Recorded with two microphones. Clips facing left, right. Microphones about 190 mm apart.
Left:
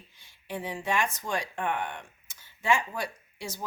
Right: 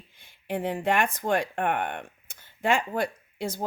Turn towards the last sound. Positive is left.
turn(degrees=-55)  # may be behind; listen again after turning